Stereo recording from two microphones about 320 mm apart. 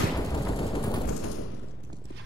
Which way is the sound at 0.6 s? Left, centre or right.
Centre.